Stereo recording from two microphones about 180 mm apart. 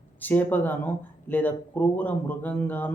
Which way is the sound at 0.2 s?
10° left (ahead or behind).